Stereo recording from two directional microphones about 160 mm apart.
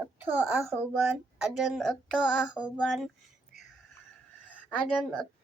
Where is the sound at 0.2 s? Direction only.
10° right (ahead or behind).